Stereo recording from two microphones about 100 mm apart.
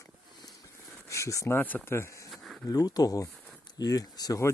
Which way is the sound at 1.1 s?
30° left (ahead or behind).